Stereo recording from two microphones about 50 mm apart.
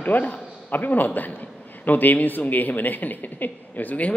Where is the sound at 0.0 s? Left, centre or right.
Left.